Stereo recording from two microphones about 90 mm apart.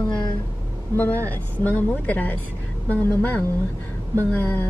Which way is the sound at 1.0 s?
20° left (ahead or behind).